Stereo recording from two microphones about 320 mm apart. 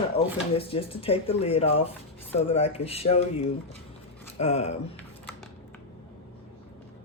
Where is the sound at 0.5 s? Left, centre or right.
Centre.